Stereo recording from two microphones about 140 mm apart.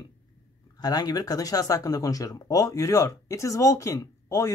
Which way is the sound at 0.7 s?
30° left (ahead or behind).